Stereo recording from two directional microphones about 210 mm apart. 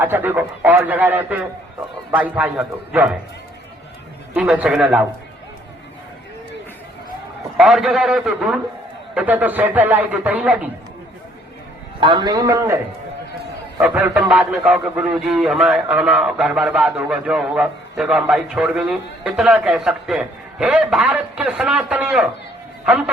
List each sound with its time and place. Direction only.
0.0 s a man's voice: 10° right (ahead or behind)
4.4 s a man's voice: 5° right (ahead or behind)
7.5 s a man's voice: centre (ahead or behind)
11.9 s a man's voice: 20° right (ahead or behind); by 23.1 s 5° right (ahead or behind)